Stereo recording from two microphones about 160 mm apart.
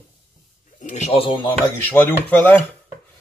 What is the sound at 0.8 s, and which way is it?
Speech, 45° left (ahead or behind).